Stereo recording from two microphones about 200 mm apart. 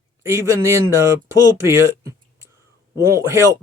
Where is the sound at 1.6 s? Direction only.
15° right (ahead or behind).